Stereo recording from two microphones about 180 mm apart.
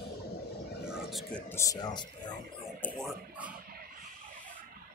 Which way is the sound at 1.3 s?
15° left (ahead or behind).